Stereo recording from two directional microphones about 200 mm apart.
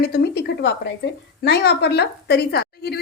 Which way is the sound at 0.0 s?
55° left (ahead or behind).